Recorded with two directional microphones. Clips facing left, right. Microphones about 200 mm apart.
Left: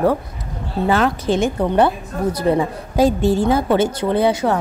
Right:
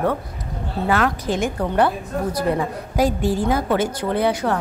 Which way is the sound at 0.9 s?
25° left (ahead or behind).